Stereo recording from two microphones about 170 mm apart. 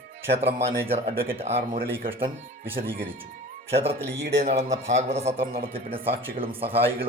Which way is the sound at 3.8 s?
35° right (ahead or behind).